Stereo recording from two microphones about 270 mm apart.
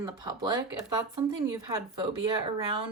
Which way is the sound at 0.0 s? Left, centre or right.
Centre.